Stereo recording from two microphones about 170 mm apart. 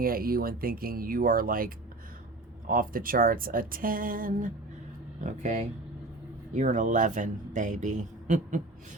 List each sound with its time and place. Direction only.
0.0 s a man's voice: 60° right (ahead or behind)